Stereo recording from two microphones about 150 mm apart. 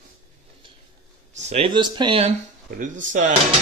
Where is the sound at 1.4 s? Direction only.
45° right (ahead or behind).